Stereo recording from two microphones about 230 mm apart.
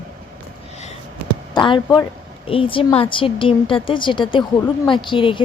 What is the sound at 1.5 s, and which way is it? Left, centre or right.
Speech, centre.